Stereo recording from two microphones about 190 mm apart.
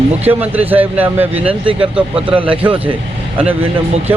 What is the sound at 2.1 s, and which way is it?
Speech, 30° right (ahead or behind).